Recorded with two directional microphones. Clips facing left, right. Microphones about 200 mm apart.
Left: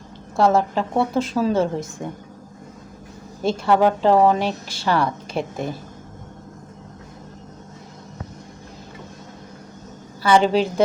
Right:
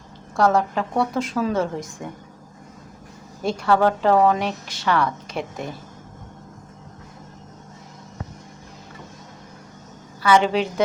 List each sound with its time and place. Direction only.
0.3 s a woman's voice: 25° left (ahead or behind)
3.4 s speech: 15° left (ahead or behind)
4.3 s a woman's voice: 30° left (ahead or behind)
10.2 s a woman's voice: 30° left (ahead or behind)